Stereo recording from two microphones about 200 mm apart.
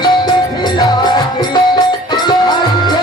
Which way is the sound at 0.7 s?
20° left (ahead or behind).